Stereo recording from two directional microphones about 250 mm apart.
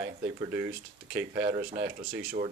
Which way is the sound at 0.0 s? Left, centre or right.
Right.